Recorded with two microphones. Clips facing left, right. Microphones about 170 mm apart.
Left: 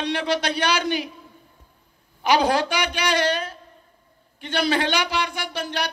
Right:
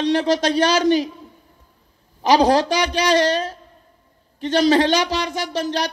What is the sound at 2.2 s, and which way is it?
Speech, 35° right (ahead or behind).